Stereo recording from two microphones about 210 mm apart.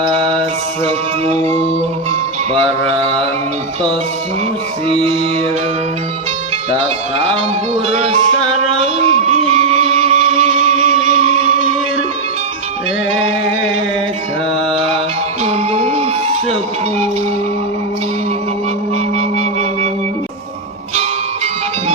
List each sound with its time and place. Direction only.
0.0 s mantra: 25° right (ahead or behind)
0.9 s music: 30° right (ahead or behind)
7.9 s music: 30° right (ahead or behind)
14.7 s mantra: 25° right (ahead or behind)
15.4 s music: 30° right (ahead or behind)
19.1 s music: 30° right (ahead or behind)